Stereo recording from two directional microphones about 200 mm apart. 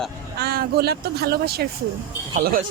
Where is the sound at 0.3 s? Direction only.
50° right (ahead or behind).